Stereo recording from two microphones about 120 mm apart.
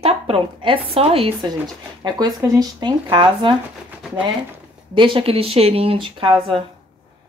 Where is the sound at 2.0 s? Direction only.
30° right (ahead or behind).